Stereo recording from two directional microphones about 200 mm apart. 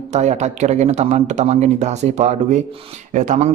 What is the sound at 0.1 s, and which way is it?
Speech, 35° right (ahead or behind).